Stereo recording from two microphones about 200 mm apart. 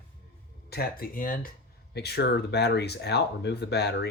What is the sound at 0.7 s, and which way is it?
Speech, 50° left (ahead or behind).